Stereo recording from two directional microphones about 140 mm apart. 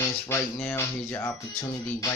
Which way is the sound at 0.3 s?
15° left (ahead or behind).